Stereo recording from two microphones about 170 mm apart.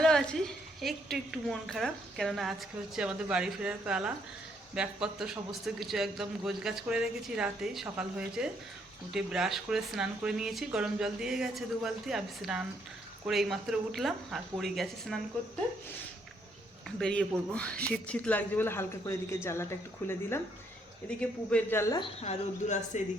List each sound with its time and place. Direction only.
0.0 s a sound: 5° left (ahead or behind)
1.1 s a man's voice: centre (ahead or behind)
17.0 s speech: 5° left (ahead or behind)
21.2 s speech: 10° left (ahead or behind)
22.2 s speech: 40° left (ahead or behind)